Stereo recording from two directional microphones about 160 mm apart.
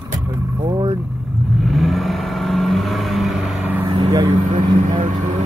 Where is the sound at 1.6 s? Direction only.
Centre (ahead or behind).